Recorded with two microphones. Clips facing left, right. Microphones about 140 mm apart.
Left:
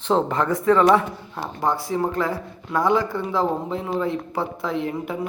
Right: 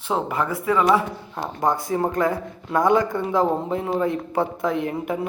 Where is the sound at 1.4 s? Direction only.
20° right (ahead or behind).